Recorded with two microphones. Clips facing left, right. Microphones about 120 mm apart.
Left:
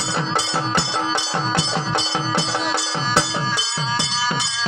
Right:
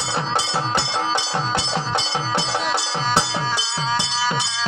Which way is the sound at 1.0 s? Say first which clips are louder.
Even; 15° right (ahead or behind).